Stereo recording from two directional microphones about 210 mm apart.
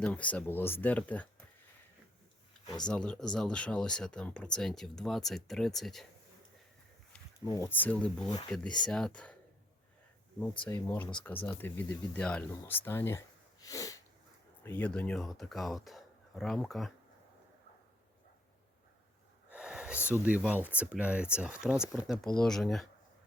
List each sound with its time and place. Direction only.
0.0 s speech: 5° left (ahead or behind)
2.8 s speech: 5° left (ahead or behind)
7.4 s speech: 15° left (ahead or behind)
8.3 s speech: 20° left (ahead or behind)
8.9 s speech: 5° left (ahead or behind)
10.7 s speech: 10° left (ahead or behind)
19.5 s a sound: 5° right (ahead or behind)
20.1 s speech: 5° right (ahead or behind)